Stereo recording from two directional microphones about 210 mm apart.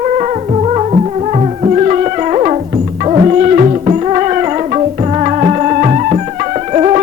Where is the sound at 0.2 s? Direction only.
30° right (ahead or behind).